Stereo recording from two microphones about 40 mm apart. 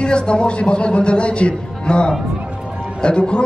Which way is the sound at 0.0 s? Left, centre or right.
Left.